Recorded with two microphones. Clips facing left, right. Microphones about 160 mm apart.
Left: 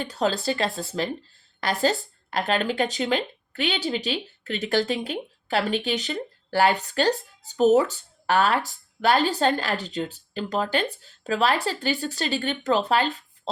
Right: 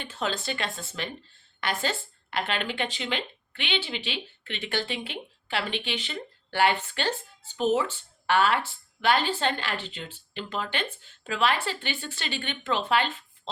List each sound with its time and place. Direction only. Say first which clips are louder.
0.0 s speech: left 7 dB; 40° left (ahead or behind)